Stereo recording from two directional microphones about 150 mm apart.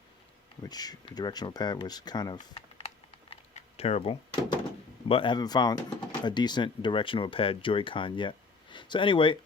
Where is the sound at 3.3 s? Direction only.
40° left (ahead or behind).